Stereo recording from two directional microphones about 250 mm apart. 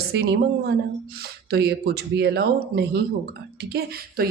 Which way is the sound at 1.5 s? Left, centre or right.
Right.